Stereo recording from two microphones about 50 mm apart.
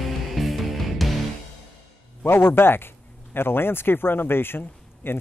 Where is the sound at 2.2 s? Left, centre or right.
Left.